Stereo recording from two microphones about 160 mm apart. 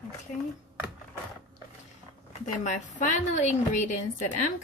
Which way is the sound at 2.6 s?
50° left (ahead or behind).